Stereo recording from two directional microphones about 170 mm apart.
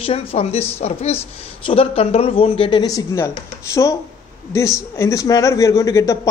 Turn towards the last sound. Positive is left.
turn(degrees=20)  # may be behind; listen again after turning